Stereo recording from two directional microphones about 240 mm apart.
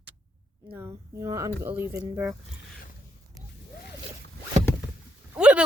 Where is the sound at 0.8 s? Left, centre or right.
Centre.